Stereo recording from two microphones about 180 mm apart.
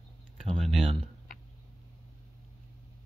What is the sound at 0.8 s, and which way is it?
Speech, 30° right (ahead or behind).